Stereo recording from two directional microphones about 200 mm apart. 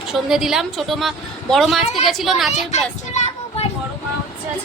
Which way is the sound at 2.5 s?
35° left (ahead or behind).